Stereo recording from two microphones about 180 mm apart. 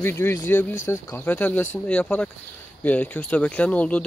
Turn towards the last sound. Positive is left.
turn(degrees=5)  # may be behind; listen again after turning